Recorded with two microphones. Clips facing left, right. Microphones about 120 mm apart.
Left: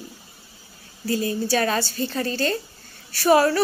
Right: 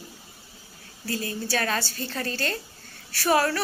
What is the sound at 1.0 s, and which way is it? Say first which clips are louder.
Speech: left 7 dB; 15° left (ahead or behind).